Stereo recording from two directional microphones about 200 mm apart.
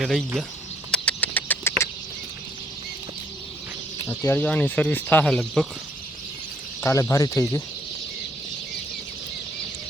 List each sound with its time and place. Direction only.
0.0 s speech: centre (ahead or behind)
0.9 s a sound: 5° left (ahead or behind)
4.0 s speech: 15° left (ahead or behind)
6.8 s speech: 15° left (ahead or behind)